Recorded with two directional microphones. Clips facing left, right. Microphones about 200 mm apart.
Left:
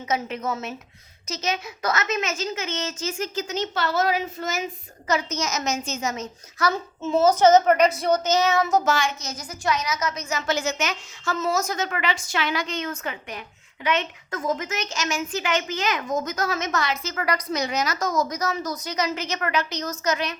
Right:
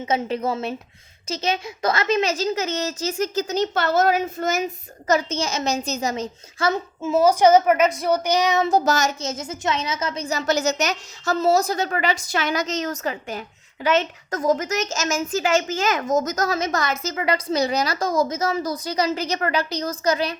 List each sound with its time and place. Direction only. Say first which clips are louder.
0.0 s a woman's voice: right 4 dB; 30° right (ahead or behind)
7.0 s a woman's voice: right 1 dB; 10° right (ahead or behind)
7.9 s a woman's voice: right 1 dB; centre (ahead or behind)
8.1 s a woman's voice: right 1 dB; 15° right (ahead or behind)
8.6 s a woman's voice: right 2 dB; 35° right (ahead or behind)
9.2 s a woman's voice: right 2 dB; 25° right (ahead or behind); by 17.2 s 45° right (ahead or behind)
17.2 s a woman's voice: right 5 dB; 25° right (ahead or behind)